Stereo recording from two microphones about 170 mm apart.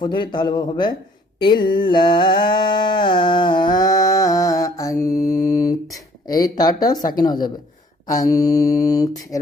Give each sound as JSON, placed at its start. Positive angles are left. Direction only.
{"t": 0.0, "sound": "mantra", "side_deg": 25}
{"t": 1.7, "sound": "a sound", "side_deg": 30}
{"t": 6.2, "sound": "mantra", "side_deg": 20}